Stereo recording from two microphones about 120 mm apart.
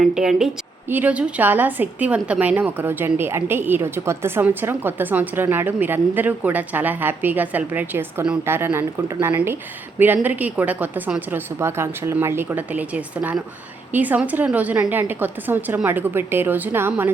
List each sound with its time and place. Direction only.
0.0 s a woman's voice: 5° right (ahead or behind)
0.9 s a woman's voice: 15° right (ahead or behind)